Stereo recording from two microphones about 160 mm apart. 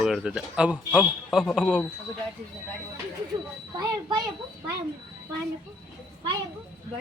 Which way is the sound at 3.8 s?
25° right (ahead or behind).